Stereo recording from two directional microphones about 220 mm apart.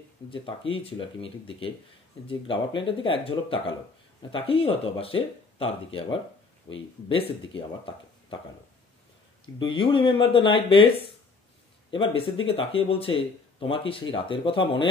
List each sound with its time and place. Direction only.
0.3 s speech: 25° left (ahead or behind)
9.6 s speech: 20° left (ahead or behind)